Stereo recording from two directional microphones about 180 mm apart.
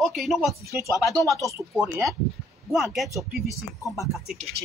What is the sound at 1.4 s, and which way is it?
Speech, 15° right (ahead or behind).